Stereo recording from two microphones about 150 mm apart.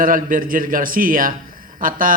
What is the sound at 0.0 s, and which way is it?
A man's voice, 65° right (ahead or behind).